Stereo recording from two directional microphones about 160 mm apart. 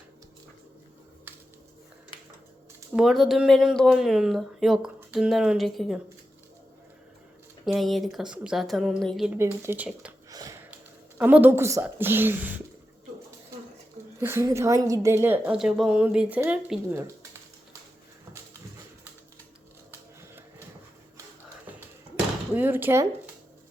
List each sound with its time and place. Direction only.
2.9 s speech: centre (ahead or behind)
7.6 s speech: centre (ahead or behind)
9.4 s speech: 10° right (ahead or behind)
10.2 s a sound: 25° right (ahead or behind)
11.2 s speech: 10° right (ahead or behind)
14.2 s speech: 15° right (ahead or behind)
15.5 s speech: 5° right (ahead or behind)
22.1 s a sound: 10° right (ahead or behind)